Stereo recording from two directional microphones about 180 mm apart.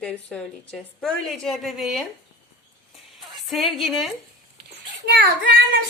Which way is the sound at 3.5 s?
Centre (ahead or behind).